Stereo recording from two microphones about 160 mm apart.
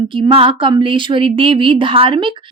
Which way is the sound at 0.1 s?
35° right (ahead or behind).